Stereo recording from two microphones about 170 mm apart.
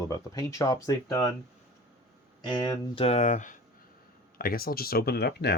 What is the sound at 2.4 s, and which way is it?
Speech, 25° left (ahead or behind).